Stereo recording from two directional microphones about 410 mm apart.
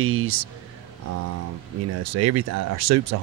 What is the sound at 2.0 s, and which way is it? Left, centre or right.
Speech, right.